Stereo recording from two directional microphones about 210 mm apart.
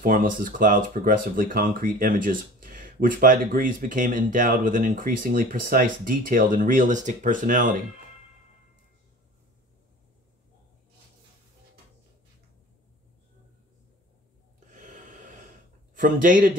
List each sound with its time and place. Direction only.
0.4 s speech: 40° right (ahead or behind)
14.7 s a sound: 35° right (ahead or behind)
15.9 s speech: 40° right (ahead or behind)